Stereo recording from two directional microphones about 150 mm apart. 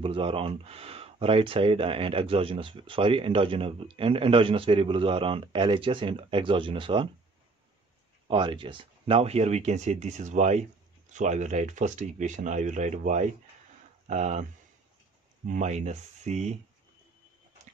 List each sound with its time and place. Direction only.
0.0 s speech: 35° right (ahead or behind)
8.3 s speech: 35° right (ahead or behind); by 14.4 s 50° right (ahead or behind)
15.4 s speech: 55° right (ahead or behind)